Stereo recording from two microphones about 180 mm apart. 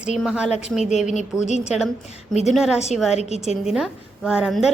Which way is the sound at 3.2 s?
35° left (ahead or behind).